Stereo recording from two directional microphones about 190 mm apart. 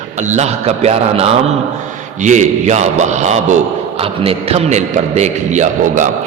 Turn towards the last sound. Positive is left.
turn(degrees=-40)  # may be behind; listen again after turning